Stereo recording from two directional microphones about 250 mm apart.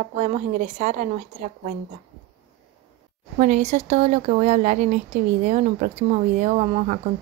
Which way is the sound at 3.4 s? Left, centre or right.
Right.